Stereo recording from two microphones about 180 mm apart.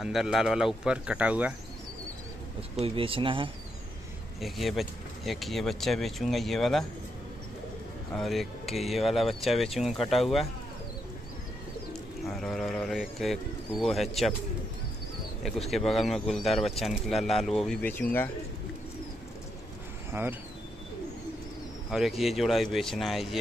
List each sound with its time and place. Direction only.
0.0 s speech: centre (ahead or behind)
2.8 s speech: 30° right (ahead or behind)
4.4 s speech: centre (ahead or behind)
8.1 s speech: centre (ahead or behind)
11.9 s speech: centre (ahead or behind)
15.7 s speech: centre (ahead or behind)
20.1 s speech: 10° right (ahead or behind)
21.9 s speech: centre (ahead or behind)